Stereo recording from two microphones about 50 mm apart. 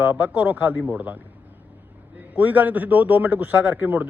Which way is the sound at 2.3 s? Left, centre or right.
Right.